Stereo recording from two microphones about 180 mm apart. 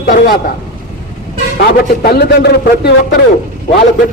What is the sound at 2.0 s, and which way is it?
A man's voice, 60° left (ahead or behind).